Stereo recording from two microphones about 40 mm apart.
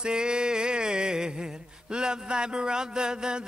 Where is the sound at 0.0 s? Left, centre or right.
Right.